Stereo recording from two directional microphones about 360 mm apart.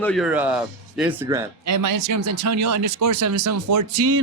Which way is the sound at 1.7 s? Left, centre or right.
Right.